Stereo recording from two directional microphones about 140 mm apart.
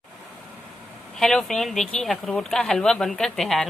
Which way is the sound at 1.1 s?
5° left (ahead or behind).